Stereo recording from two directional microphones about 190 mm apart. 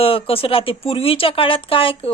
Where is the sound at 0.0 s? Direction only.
30° left (ahead or behind).